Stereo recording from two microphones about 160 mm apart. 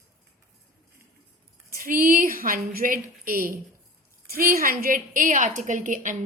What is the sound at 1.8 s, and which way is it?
A woman's voice, 60° right (ahead or behind).